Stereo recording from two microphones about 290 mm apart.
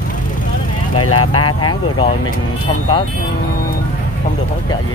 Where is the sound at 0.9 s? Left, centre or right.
Left.